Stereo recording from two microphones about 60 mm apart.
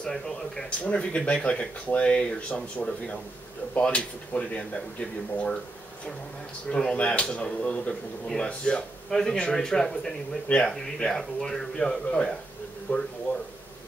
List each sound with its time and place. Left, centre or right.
0.0 s speech: centre
0.7 s speech: centre
6.7 s speech: centre
12.9 s speech: left